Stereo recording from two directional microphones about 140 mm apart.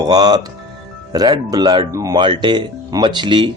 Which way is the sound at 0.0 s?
30° right (ahead or behind).